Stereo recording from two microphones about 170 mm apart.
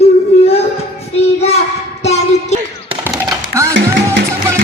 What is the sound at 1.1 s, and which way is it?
Child singing, 40° left (ahead or behind).